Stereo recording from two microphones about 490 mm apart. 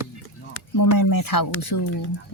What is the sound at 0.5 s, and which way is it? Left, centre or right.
Speech, left.